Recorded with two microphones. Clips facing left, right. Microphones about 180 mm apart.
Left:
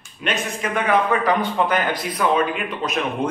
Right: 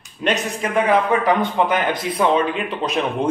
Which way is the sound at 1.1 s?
20° right (ahead or behind).